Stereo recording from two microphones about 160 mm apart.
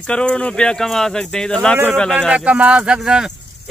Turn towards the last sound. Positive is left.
turn(degrees=-5)  # may be behind; listen again after turning